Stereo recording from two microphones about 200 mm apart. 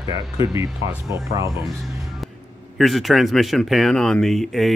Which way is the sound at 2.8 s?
Centre (ahead or behind).